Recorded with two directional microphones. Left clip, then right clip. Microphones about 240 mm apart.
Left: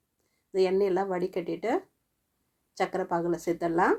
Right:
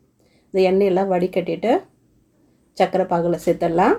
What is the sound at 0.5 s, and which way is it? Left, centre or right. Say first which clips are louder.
Speech: right 8 dB; left.